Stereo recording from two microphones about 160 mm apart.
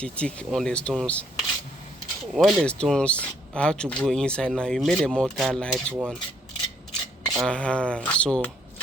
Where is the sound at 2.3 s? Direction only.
Centre (ahead or behind).